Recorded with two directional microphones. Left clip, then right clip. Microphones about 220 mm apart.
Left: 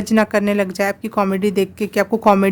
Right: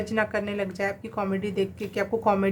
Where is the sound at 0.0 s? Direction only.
50° left (ahead or behind).